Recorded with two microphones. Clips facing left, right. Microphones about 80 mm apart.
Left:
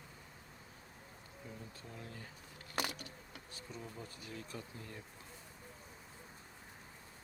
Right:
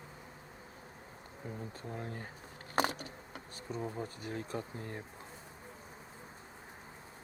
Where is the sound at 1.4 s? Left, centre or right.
Right.